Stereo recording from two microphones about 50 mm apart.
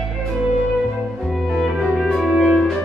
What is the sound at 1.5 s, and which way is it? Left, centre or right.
Music, centre.